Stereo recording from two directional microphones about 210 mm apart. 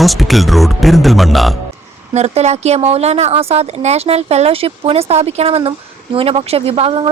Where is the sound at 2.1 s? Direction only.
30° right (ahead or behind).